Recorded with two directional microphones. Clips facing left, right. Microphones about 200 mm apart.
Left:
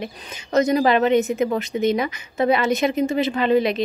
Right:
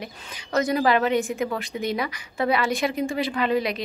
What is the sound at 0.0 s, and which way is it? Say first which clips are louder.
A woman's voice: left 5 dB; 25° left (ahead or behind).